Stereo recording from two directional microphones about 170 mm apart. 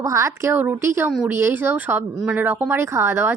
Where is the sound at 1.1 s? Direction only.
5° right (ahead or behind).